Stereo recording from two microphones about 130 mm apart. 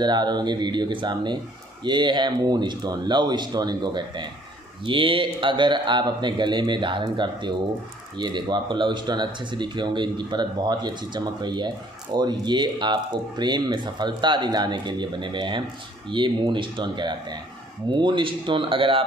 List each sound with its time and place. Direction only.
0.0 s speech: 35° right (ahead or behind)